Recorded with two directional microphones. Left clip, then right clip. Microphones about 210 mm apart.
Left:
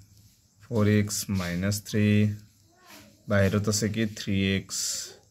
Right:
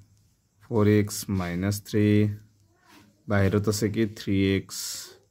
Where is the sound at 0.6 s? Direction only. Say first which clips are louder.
Right 4 dB; 55° right (ahead or behind).